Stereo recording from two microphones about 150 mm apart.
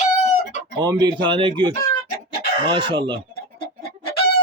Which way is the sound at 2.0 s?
90° left.